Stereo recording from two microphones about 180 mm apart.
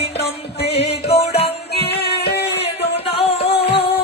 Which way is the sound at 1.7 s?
65° left (ahead or behind).